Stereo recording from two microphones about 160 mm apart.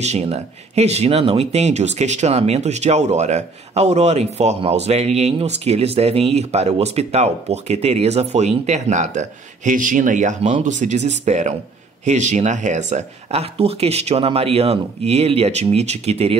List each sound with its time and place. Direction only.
0.0 s speech: 40° right (ahead or behind)